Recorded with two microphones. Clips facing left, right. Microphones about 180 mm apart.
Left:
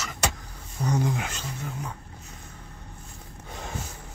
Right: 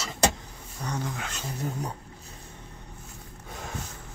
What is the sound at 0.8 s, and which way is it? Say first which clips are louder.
Speech: left 6 dB; 10° left (ahead or behind).